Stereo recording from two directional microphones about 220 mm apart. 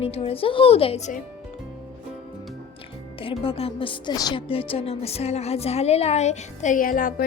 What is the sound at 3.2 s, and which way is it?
A woman's voice, 25° left (ahead or behind).